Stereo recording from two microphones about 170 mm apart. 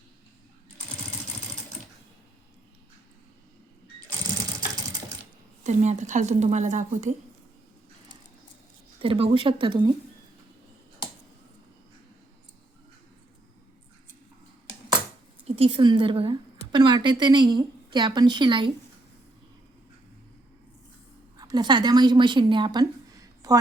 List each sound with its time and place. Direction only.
5.6 s a woman's voice: 45° right (ahead or behind)
9.0 s speech: 30° right (ahead or behind)
15.4 s a woman's voice: 35° right (ahead or behind)
21.3 s a woman's voice: 25° right (ahead or behind)